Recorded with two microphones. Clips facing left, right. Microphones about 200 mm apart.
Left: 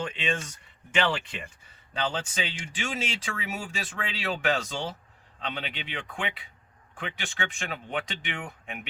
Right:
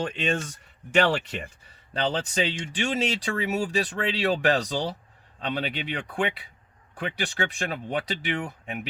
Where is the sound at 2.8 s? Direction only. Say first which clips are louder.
Right 7 dB; 40° right (ahead or behind).